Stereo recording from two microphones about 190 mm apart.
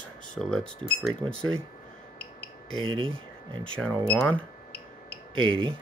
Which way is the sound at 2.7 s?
25° right (ahead or behind).